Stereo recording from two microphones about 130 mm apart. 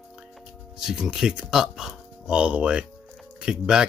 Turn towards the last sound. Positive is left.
turn(degrees=-5)  # may be behind; listen again after turning